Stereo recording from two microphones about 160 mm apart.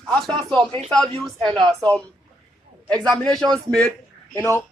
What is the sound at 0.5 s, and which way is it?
Speech, 30° right (ahead or behind).